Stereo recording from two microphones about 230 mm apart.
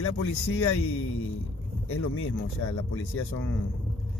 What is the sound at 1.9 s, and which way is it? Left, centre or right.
Speech, left.